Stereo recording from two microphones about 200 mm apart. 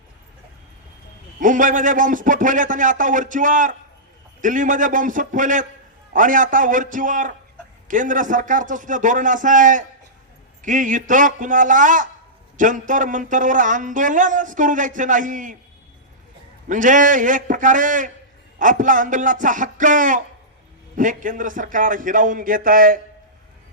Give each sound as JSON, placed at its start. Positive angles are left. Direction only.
{"t": 1.4, "sound": "speech", "side_deg": -40}
{"t": 16.6, "sound": "speech", "side_deg": -40}